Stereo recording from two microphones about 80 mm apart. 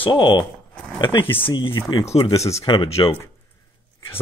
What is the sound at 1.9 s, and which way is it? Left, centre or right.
Speech, left.